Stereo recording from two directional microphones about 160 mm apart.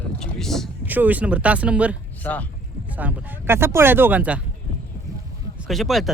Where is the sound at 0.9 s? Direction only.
10° right (ahead or behind).